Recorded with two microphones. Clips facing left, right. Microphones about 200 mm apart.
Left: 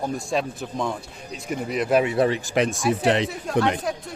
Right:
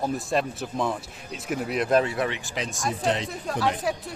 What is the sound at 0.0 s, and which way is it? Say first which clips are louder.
Speech: even; centre (ahead or behind).